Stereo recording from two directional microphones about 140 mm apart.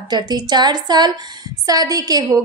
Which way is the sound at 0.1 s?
30° right (ahead or behind).